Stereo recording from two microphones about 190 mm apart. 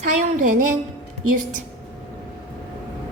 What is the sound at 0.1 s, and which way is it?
Speech, 40° right (ahead or behind).